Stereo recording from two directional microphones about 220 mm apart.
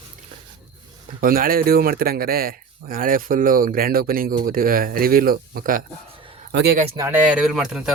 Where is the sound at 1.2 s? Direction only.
40° right (ahead or behind).